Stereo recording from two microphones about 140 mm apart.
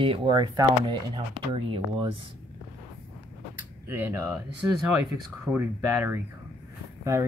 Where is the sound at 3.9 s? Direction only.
15° right (ahead or behind).